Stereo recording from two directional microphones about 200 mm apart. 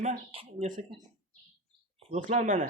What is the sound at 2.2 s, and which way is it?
Speech, 40° right (ahead or behind).